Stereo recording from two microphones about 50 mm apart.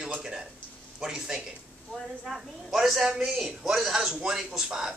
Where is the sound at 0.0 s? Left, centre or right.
Centre.